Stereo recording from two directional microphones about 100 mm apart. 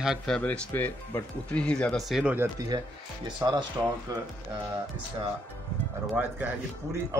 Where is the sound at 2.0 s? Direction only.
5° right (ahead or behind).